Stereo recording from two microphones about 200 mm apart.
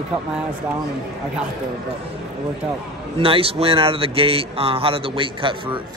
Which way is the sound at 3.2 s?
30° right (ahead or behind).